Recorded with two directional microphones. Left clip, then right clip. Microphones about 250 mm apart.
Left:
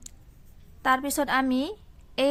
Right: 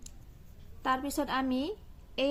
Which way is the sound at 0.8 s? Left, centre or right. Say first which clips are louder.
Left 7 dB; left.